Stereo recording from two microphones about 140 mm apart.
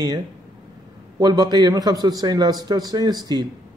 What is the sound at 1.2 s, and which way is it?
Speech, 30° right (ahead or behind).